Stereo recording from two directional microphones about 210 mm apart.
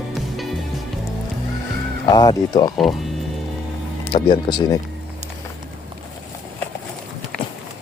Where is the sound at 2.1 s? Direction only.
20° left (ahead or behind).